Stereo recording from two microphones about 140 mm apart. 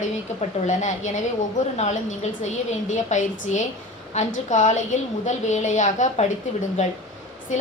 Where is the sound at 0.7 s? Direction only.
60° left (ahead or behind).